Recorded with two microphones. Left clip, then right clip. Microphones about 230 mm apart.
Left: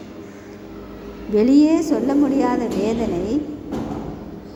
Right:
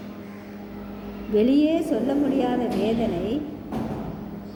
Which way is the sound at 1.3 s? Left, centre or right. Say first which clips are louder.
Left 5 dB; centre.